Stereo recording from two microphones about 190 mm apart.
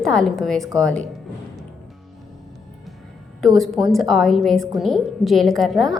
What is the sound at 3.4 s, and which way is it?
A woman's voice, centre (ahead or behind).